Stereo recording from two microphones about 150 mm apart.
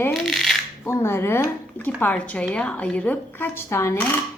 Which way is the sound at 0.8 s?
15° left (ahead or behind).